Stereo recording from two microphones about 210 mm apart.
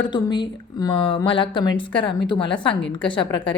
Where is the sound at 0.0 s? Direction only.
20° left (ahead or behind).